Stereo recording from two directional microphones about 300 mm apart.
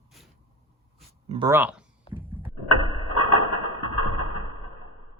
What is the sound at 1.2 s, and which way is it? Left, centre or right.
Speech, centre.